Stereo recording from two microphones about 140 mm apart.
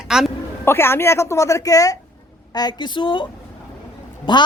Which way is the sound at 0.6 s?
15° left (ahead or behind).